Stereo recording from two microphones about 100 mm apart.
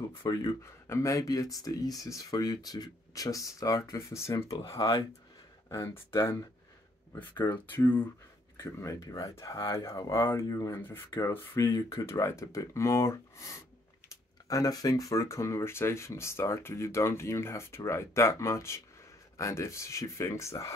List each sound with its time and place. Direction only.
0.3 s speech: 30° left (ahead or behind)
8.5 s speech: 30° left (ahead or behind)